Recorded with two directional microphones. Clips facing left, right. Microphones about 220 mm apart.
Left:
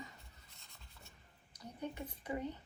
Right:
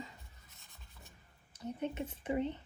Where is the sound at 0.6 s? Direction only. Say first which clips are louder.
Right 2 dB; 15° right (ahead or behind).